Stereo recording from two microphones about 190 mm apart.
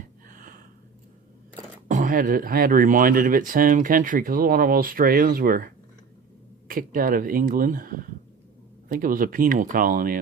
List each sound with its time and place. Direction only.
0.3 s a sound: 45° right (ahead or behind)
1.9 s speech: 45° right (ahead or behind)
6.7 s speech: 45° right (ahead or behind)